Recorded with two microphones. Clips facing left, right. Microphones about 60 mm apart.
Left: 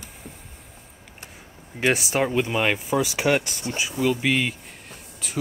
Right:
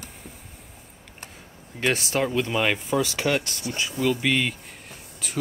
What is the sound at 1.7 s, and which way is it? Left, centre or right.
Speech, centre.